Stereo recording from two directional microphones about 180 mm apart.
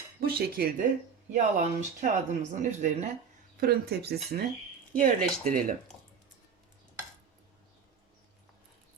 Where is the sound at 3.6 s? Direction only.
60° right (ahead or behind).